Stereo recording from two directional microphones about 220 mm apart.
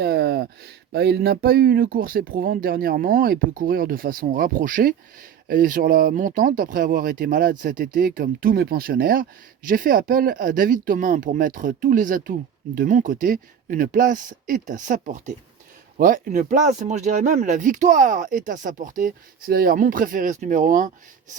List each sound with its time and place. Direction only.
0.0 s speech: 45° right (ahead or behind)